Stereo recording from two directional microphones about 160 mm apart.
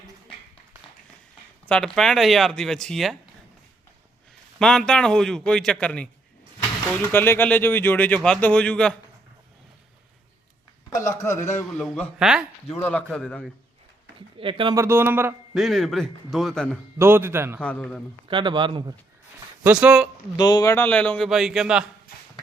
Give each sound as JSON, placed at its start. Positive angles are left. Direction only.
{"t": 1.6, "sound": "speech", "side_deg": 5}
{"t": 4.6, "sound": "speech", "side_deg": 5}
{"t": 10.9, "sound": "a man's voice", "side_deg": 20}
{"t": 11.8, "sound": "speech", "side_deg": 0}
{"t": 12.7, "sound": "speech", "side_deg": 10}
{"t": 14.3, "sound": "speech", "side_deg": -30}
{"t": 14.8, "sound": "a man's voice", "side_deg": -15}
{"t": 15.5, "sound": "speech", "side_deg": 0}
{"t": 17.0, "sound": "a man's voice", "side_deg": -15}
{"t": 17.6, "sound": "speech", "side_deg": 5}
{"t": 18.3, "sound": "speech", "side_deg": -30}
{"t": 19.6, "sound": "speech", "side_deg": -5}
{"t": 20.3, "sound": "speech", "side_deg": 25}